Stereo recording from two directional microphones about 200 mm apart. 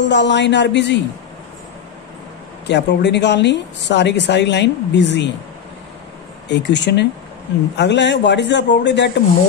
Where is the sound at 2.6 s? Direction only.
60° left (ahead or behind).